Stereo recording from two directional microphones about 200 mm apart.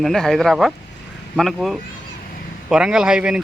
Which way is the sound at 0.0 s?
Centre (ahead or behind).